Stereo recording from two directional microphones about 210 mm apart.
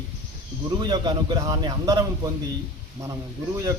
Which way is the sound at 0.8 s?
20° right (ahead or behind).